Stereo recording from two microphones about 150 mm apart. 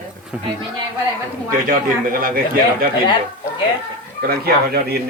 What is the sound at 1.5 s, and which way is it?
Speech, 70° right (ahead or behind).